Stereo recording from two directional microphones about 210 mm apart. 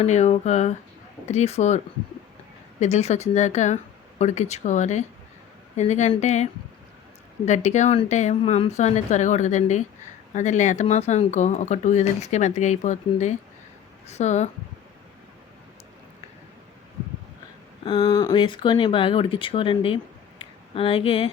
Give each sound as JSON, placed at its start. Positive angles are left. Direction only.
{"t": 0.0, "sound": "speech", "side_deg": 30}
{"t": 2.8, "sound": "speech", "side_deg": 30}
{"t": 17.8, "sound": "speech", "side_deg": 25}
{"t": 20.4, "sound": "a sound", "side_deg": 25}